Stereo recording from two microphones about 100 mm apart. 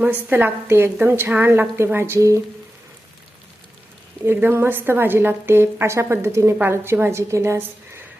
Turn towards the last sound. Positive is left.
turn(degrees=-25)  # may be behind; listen again after turning